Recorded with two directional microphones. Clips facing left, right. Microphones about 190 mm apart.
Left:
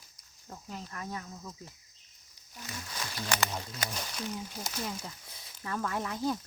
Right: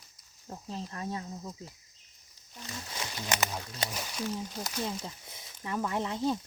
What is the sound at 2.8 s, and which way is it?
Speech, 20° right (ahead or behind).